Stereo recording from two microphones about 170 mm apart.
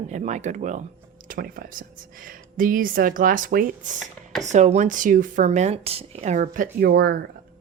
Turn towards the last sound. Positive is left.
turn(degrees=-65)  # may be behind; listen again after turning